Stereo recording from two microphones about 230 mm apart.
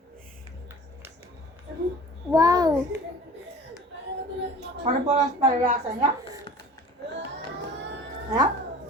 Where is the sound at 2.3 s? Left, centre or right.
Centre.